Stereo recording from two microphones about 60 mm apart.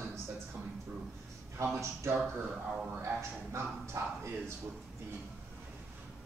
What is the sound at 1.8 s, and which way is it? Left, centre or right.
Speech, right.